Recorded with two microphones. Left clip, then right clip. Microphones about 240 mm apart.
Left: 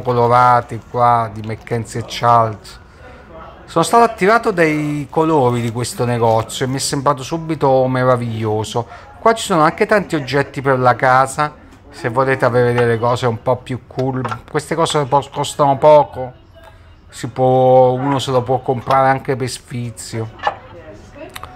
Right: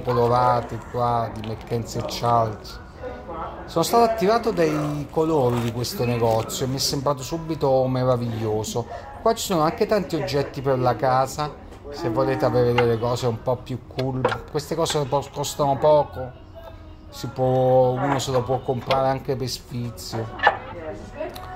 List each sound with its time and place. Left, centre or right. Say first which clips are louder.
0.3 s speech: left 8 dB; centre
3.7 s speech: left 6 dB; centre
17.2 s speech: left 8 dB; centre
18.3 s speech: left 7 dB; left
18.9 s speech: left 12 dB; centre